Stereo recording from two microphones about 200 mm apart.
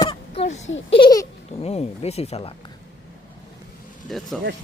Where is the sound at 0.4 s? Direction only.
35° left (ahead or behind).